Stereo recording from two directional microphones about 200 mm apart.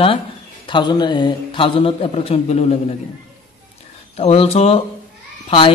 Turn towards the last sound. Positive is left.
turn(degrees=25)  # may be behind; listen again after turning